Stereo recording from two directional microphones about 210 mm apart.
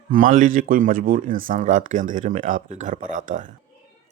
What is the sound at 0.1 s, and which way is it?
Speech, 40° right (ahead or behind).